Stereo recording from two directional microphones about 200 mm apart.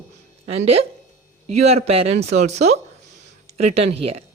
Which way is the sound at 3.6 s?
30° right (ahead or behind).